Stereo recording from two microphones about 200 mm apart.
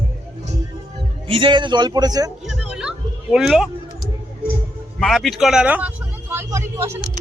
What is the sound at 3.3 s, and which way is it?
Speech, centre (ahead or behind).